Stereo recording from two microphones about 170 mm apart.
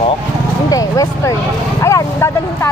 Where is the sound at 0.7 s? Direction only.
20° left (ahead or behind).